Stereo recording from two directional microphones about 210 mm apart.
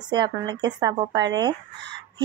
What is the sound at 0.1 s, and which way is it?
A woman's voice, 20° right (ahead or behind).